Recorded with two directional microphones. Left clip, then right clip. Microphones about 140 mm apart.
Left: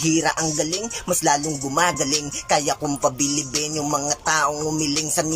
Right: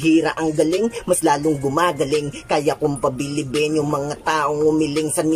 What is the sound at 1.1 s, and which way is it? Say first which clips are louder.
Speech: right 2 dB; 15° right (ahead or behind).